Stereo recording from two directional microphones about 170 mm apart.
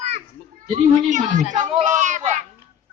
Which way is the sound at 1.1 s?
45° right (ahead or behind).